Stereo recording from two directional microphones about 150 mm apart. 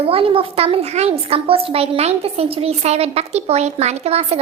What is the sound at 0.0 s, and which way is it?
A woman's voice, 40° right (ahead or behind).